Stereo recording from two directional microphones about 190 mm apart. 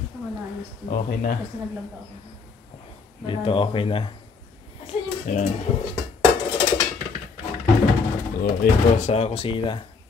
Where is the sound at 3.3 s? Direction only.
25° left (ahead or behind).